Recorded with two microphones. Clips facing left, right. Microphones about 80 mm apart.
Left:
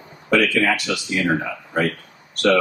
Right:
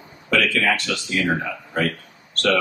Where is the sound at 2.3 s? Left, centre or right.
Centre.